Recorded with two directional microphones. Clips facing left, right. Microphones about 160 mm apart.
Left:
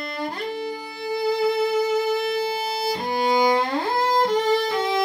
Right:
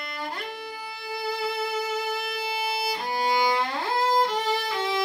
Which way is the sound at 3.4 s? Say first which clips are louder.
Left 5 dB; 45° left (ahead or behind).